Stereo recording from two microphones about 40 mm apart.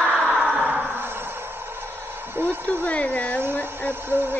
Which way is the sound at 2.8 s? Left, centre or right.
Left.